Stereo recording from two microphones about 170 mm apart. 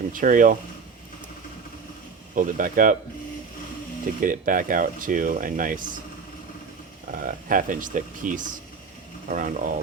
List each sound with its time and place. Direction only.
0.1 s speech: 50° right (ahead or behind)
2.3 s speech: 50° right (ahead or behind)
4.2 s speech: 50° right (ahead or behind)
7.1 s speech: 55° right (ahead or behind)